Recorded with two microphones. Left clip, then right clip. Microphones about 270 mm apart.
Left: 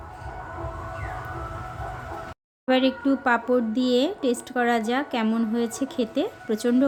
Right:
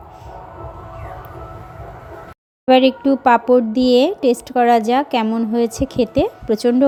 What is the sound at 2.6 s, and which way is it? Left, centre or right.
A woman's voice, centre.